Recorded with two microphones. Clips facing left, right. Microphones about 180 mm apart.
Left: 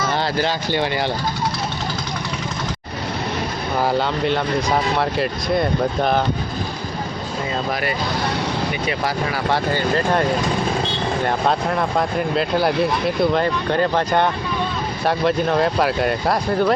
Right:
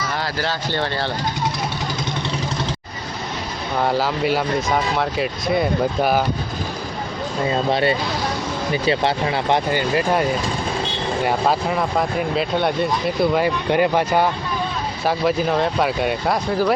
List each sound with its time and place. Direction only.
0.3 s speech: 15° left (ahead or behind)
3.8 s speech: centre (ahead or behind)
7.7 s speech: 25° right (ahead or behind); by 10.2 s 10° right (ahead or behind)
11.3 s speech: 5° right (ahead or behind)